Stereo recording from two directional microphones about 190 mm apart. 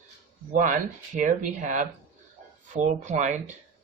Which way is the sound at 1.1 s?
40° right (ahead or behind).